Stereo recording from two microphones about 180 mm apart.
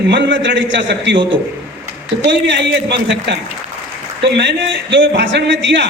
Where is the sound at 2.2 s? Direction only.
80° right.